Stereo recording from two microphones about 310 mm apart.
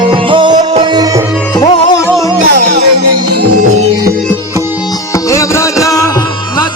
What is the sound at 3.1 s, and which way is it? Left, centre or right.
Music, right.